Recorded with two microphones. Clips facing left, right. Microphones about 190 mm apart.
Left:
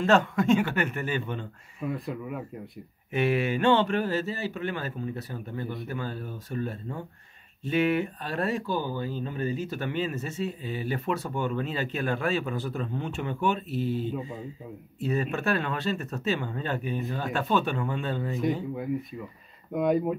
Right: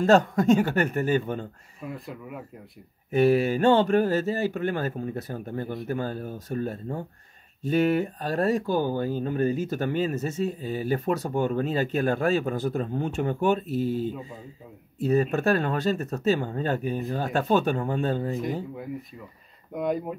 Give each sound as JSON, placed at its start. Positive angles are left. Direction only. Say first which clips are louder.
{"t": 0.0, "sound": "speech", "louder": "right 3 dB", "side_deg": -40}
{"t": 1.9, "sound": "speech", "louder": "left 4 dB", "side_deg": 0}
{"t": 3.1, "sound": "speech", "louder": "right 5 dB", "side_deg": -40}
{"t": 19.7, "sound": "speech", "louder": "left 3 dB", "side_deg": 0}